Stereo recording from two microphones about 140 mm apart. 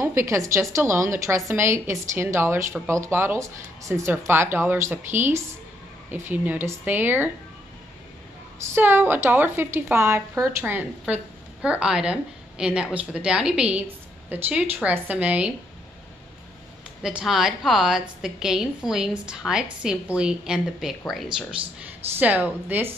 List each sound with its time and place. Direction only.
0.0 s a woman's voice: 20° right (ahead or behind)
8.5 s speech: 15° right (ahead or behind)
17.0 s a woman's voice: 5° right (ahead or behind)